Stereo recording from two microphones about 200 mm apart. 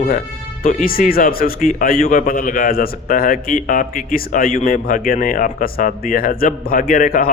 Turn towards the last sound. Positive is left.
turn(degrees=45)  # may be behind; listen again after turning